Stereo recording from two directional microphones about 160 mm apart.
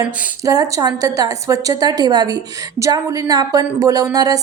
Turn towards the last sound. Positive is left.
turn(degrees=-20)  # may be behind; listen again after turning